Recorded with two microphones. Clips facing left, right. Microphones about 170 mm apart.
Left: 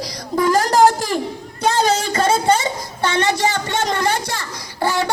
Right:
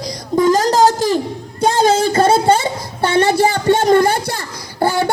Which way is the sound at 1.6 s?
30° right (ahead or behind).